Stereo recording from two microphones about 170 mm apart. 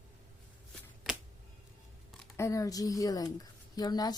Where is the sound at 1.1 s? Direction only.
Centre (ahead or behind).